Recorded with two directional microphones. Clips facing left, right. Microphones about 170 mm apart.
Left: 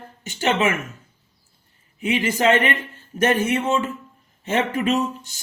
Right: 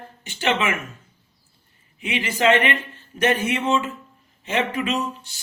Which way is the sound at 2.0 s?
45° left (ahead or behind).